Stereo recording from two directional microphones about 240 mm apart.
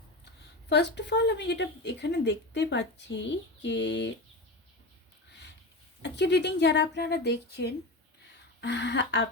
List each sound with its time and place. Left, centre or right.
0.7 s speech: left
6.0 s speech: left